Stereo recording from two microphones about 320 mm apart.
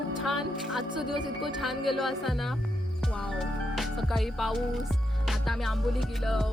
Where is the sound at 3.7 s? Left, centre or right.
Centre.